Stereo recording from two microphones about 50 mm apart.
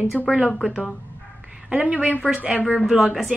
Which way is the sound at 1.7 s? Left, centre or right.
Right.